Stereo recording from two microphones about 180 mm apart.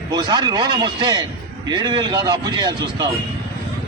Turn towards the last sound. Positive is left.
turn(degrees=-20)  # may be behind; listen again after turning